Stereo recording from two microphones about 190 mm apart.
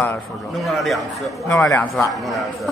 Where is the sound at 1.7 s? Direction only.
15° left (ahead or behind).